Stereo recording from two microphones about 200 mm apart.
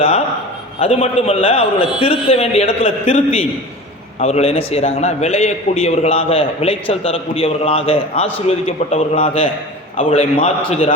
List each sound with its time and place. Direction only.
0.8 s a man's voice: 30° left (ahead or behind)